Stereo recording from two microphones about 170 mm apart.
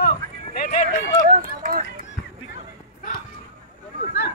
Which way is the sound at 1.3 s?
50° right (ahead or behind).